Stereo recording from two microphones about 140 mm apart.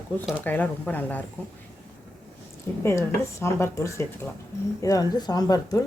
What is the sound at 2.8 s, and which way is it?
Speech, 20° left (ahead or behind).